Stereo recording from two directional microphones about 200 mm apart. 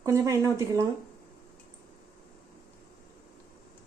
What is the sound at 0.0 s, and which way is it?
Speech, 15° right (ahead or behind).